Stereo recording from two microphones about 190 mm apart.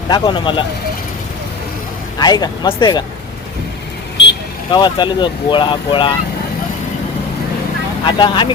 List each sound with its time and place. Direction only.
0.1 s speech: 25° left (ahead or behind)
2.1 s speech: 20° left (ahead or behind)
4.7 s speech: 25° left (ahead or behind)
8.0 s speech: 25° left (ahead or behind)